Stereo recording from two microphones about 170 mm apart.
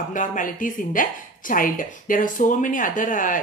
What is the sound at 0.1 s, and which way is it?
Speech, 50° left (ahead or behind).